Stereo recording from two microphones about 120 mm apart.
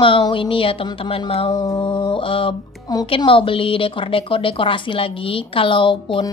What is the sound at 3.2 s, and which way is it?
Speech, 45° left (ahead or behind).